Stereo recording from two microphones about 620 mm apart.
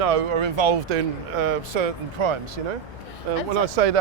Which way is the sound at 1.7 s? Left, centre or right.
Right.